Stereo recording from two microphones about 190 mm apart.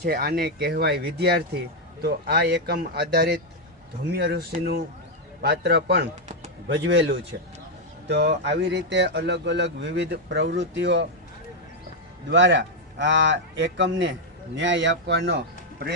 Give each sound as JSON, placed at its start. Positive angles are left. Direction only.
{"t": 0.0, "sound": "speech", "side_deg": -55}
{"t": 12.3, "sound": "a man's voice", "side_deg": -70}